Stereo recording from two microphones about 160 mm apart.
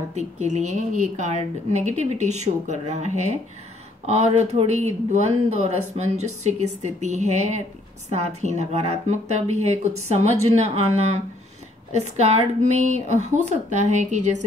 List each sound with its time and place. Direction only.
0.1 s speech: 45° right (ahead or behind)